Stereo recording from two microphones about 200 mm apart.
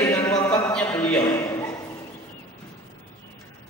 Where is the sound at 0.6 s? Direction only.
5° left (ahead or behind).